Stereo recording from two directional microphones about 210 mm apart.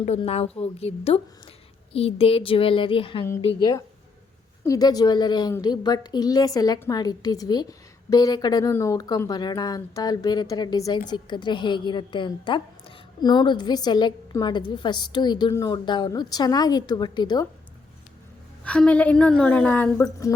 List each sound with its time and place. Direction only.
0.0 s a woman's voice: 30° left (ahead or behind)
18.6 s a woman's voice: 5° left (ahead or behind)